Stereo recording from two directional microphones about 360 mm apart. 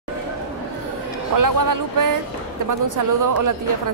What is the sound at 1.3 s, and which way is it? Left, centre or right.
A woman's voice, right.